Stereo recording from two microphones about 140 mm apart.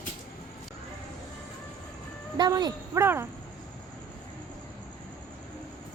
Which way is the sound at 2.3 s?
30° right (ahead or behind).